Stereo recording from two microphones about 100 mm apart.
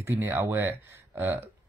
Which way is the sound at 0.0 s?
25° right (ahead or behind).